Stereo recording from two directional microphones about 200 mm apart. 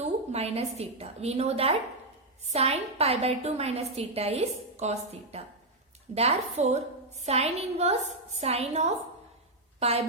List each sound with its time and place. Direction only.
0.0 s a woman's voice: 30° right (ahead or behind)